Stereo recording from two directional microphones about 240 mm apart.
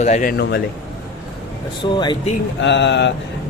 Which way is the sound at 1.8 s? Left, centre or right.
Centre.